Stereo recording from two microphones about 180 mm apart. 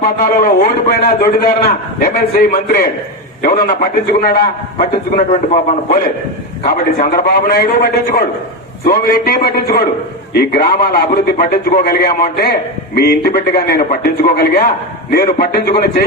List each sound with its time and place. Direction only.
0.0 s a man's voice: 50° left (ahead or behind)
6.7 s a man's voice: 55° left (ahead or behind)